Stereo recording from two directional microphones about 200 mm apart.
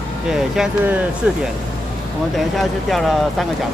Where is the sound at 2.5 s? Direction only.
Centre (ahead or behind).